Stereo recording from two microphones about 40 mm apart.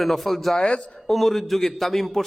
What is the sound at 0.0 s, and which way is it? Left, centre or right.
A man's voice, centre.